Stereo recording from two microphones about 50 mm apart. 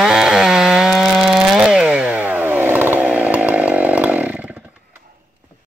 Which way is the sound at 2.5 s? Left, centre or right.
Right.